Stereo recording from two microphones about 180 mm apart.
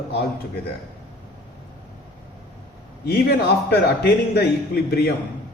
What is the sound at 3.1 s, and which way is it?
A man's voice, 60° left (ahead or behind).